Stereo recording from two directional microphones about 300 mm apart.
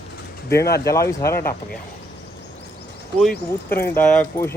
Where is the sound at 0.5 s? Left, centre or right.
Centre.